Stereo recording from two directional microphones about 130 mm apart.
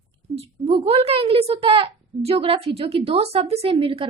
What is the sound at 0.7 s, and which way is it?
A woman's voice, 45° right (ahead or behind).